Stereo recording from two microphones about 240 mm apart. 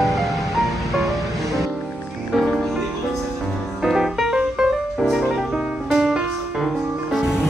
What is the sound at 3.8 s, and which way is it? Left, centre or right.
Music, centre.